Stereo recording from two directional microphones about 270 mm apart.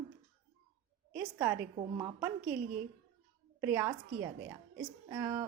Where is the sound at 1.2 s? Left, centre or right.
Centre.